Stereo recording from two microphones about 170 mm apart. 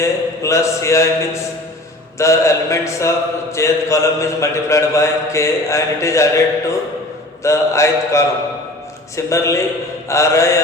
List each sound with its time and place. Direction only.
0.0 s mantra: 15° left (ahead or behind)